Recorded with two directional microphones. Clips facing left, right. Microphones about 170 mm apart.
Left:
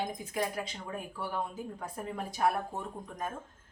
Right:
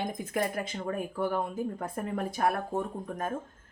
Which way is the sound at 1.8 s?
55° right (ahead or behind).